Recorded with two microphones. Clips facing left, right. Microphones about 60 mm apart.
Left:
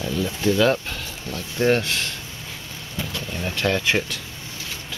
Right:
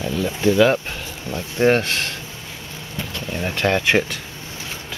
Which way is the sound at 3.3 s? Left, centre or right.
Right.